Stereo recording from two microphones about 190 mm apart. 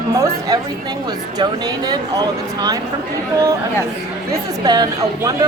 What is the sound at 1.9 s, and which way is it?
Speech, 20° right (ahead or behind).